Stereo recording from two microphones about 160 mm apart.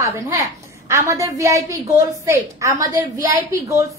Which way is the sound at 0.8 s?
20° right (ahead or behind).